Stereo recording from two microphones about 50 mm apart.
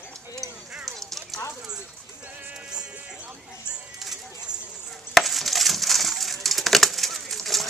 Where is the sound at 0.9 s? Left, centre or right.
Centre.